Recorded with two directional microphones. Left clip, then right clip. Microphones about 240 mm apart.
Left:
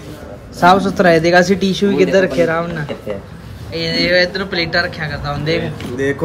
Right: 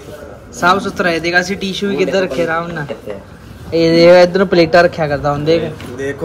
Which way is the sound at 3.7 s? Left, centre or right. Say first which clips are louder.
Right 8 dB; centre.